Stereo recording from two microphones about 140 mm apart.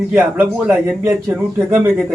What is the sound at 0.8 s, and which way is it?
A man's voice, 20° right (ahead or behind).